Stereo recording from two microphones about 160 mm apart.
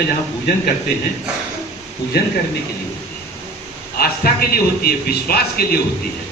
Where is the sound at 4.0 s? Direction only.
70° left (ahead or behind).